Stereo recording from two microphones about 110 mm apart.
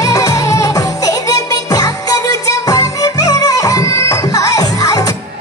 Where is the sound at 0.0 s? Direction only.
30° left (ahead or behind).